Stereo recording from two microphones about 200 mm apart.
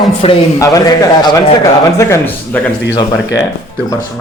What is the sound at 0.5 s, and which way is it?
A man's voice, 15° left (ahead or behind).